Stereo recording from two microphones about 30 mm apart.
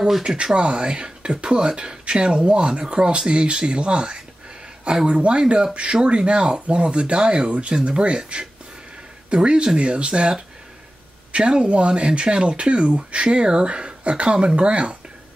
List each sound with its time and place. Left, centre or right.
0.6 s speech: right
9.3 s speech: right
11.3 s speech: right